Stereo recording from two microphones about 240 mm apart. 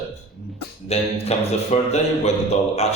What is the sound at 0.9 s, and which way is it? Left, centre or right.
Speech, left.